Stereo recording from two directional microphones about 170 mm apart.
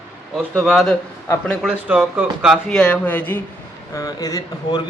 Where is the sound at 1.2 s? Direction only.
15° left (ahead or behind).